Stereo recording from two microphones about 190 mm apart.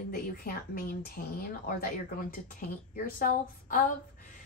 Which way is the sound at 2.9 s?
45° left (ahead or behind).